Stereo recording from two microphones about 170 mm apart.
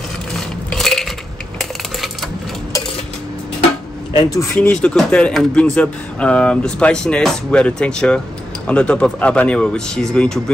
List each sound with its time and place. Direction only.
0.7 s dishes: centre (ahead or behind)
4.1 s speech: 25° left (ahead or behind)
4.6 s speech: 5° left (ahead or behind)